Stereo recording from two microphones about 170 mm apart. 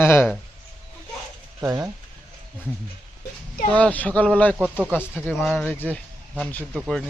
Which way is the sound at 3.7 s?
10° left (ahead or behind).